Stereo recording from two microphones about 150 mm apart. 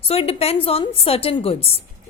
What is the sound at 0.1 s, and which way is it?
A woman's voice, 40° left (ahead or behind).